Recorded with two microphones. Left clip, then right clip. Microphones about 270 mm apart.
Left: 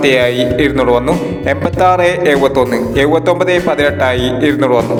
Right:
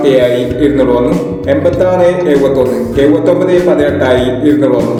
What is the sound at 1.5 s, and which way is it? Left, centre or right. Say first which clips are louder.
A man's voice: right 1 dB; left.